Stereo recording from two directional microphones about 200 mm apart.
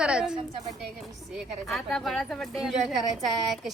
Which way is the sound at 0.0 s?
5° right (ahead or behind).